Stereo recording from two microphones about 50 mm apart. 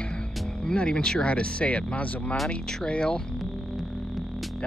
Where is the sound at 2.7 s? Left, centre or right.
Centre.